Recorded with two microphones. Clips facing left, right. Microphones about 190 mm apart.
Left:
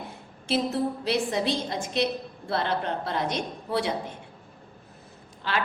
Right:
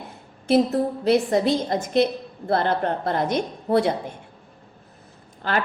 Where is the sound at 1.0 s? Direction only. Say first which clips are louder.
Right 11 dB; 50° right (ahead or behind).